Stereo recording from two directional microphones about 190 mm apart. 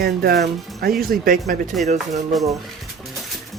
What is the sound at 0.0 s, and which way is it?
Speech, 55° right (ahead or behind).